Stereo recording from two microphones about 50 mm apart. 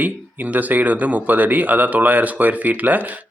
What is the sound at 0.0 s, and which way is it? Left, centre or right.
Speech, right.